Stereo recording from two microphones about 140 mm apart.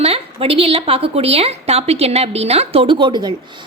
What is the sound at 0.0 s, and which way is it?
A woman's voice, 45° right (ahead or behind).